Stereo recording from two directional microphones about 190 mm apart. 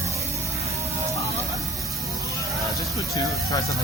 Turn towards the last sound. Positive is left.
turn(degrees=15)  # may be behind; listen again after turning